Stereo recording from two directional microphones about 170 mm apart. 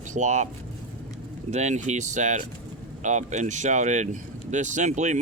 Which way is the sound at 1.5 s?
45° right (ahead or behind).